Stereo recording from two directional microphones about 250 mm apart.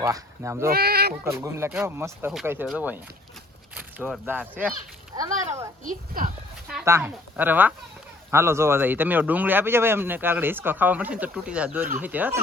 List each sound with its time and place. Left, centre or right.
0.0 s speech: centre
0.7 s speech: right
1.2 s a child's voice: centre
5.8 s speech: right
6.7 s speech: centre